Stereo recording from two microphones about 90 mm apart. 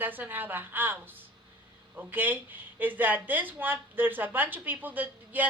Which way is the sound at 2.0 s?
20° right (ahead or behind).